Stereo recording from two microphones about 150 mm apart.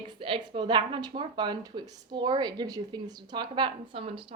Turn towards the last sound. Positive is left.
turn(degrees=-35)  # may be behind; listen again after turning